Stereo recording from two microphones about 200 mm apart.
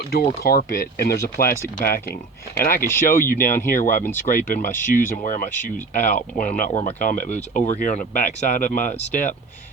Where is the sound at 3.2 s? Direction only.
45° left (ahead or behind).